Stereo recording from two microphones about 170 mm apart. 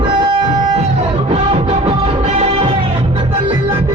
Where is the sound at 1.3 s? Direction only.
40° right (ahead or behind).